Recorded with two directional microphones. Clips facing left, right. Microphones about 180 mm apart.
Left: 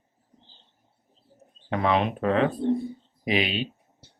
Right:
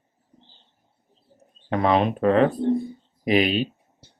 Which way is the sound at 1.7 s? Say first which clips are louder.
Right 3 dB; 40° right (ahead or behind).